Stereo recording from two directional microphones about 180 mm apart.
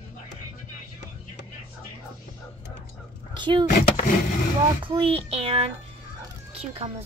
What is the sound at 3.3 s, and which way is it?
Speech, 25° right (ahead or behind).